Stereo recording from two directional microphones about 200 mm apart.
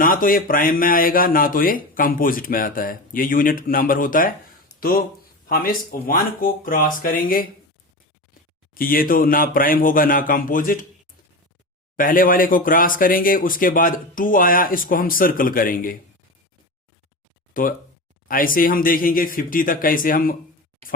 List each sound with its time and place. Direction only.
0.0 s speech: 45° left (ahead or behind)
8.7 s speech: 45° left (ahead or behind)
11.9 s speech: 45° left (ahead or behind)
17.5 s speech: 45° left (ahead or behind)